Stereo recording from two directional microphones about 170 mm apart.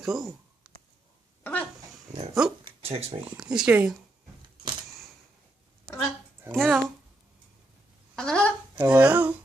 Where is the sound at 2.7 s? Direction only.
35° right (ahead or behind).